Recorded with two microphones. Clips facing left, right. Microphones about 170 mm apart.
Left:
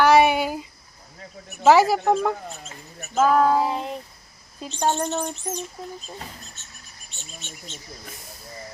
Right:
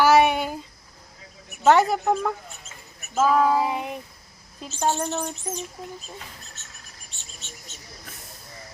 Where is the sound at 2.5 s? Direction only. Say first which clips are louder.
Left 6 dB; 35° left (ahead or behind).